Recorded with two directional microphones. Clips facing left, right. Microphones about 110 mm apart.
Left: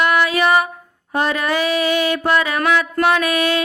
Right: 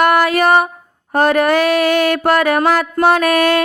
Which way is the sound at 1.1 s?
50° right (ahead or behind).